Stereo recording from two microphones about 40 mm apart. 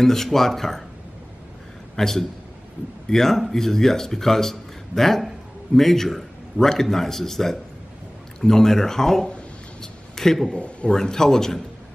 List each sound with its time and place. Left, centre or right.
0.0 s a man's voice: centre
2.0 s a man's voice: centre
9.8 s a sound: centre
10.5 s speech: left
11.0 s a man's voice: centre